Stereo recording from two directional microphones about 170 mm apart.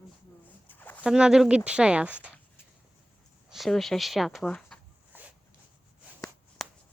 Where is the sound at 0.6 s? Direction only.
10° left (ahead or behind).